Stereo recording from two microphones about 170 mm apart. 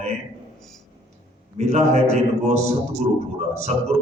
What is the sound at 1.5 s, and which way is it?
A man's voice, 40° right (ahead or behind).